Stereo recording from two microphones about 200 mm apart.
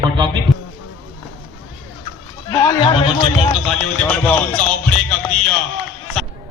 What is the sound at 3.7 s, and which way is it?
Speech, 5° left (ahead or behind).